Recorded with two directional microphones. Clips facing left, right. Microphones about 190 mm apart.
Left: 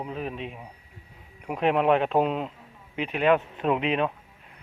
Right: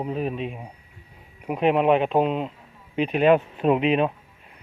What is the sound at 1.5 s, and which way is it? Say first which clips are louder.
Speech: right 3 dB; 5° right (ahead or behind).